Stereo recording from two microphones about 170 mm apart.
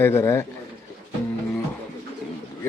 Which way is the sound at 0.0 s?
15° left (ahead or behind).